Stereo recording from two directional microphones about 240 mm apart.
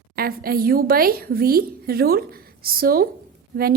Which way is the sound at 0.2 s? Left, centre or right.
Right.